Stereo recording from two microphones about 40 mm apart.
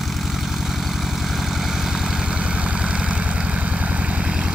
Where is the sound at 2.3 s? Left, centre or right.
Right.